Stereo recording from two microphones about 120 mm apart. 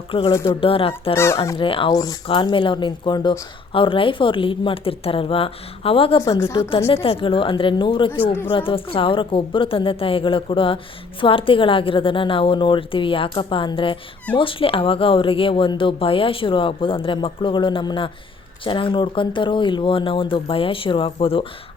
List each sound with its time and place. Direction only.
0.1 s speech: 45° left (ahead or behind)
1.1 s speech: 20° left (ahead or behind)
1.5 s speech: 45° left (ahead or behind)
1.9 s speech: 30° left (ahead or behind)
2.2 s speech: 45° left (ahead or behind)